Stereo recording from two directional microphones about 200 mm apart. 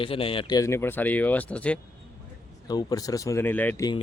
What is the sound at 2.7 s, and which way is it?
Speech, 20° left (ahead or behind).